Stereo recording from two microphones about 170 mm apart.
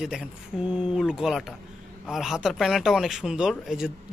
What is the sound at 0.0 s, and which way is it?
A man's voice, 5° right (ahead or behind).